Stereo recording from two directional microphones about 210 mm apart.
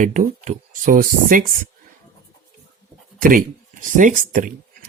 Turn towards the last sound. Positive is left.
turn(degrees=-40)  # may be behind; listen again after turning